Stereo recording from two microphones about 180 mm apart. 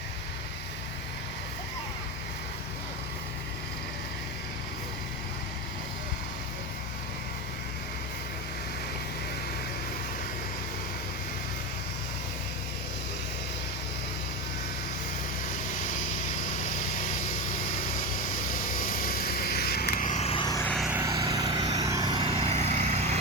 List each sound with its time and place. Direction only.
18.8 s vehicle: 55° left (ahead or behind); by 20.7 s 20° left (ahead or behind)
20.7 s vehicle: centre (ahead or behind)
20.9 s vehicle: 15° right (ahead or behind); by 23.1 s 40° right (ahead or behind)